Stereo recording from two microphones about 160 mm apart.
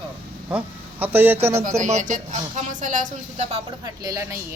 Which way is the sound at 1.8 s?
50° right (ahead or behind).